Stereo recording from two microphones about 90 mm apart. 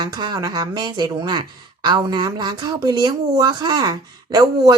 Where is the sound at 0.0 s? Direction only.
55° right (ahead or behind).